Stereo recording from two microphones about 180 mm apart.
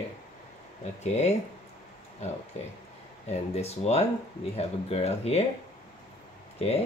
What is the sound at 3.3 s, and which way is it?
Speech, 35° left (ahead or behind).